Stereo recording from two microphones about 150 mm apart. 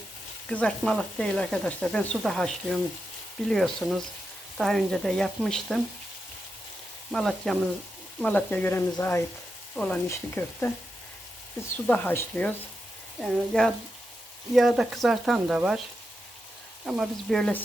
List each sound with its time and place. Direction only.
0.4 s frying: 5° left (ahead or behind)
7.1 s frying: centre (ahead or behind)
8.2 s speech: 10° left (ahead or behind)
11.9 s speech: 10° left (ahead or behind)
13.2 s frying: 5° left (ahead or behind)
16.8 s frying: centre (ahead or behind)